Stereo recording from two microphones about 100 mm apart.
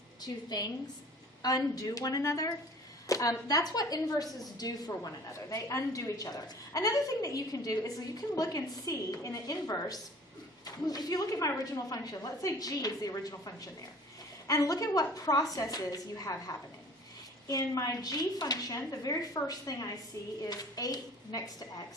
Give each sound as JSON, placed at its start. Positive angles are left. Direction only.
{"t": 0.2, "sound": "a woman's voice", "side_deg": 40}